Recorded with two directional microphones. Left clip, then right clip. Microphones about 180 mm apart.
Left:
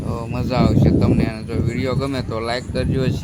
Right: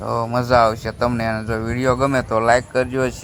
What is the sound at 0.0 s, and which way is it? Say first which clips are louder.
Speech: right 6 dB; 30° right (ahead or behind).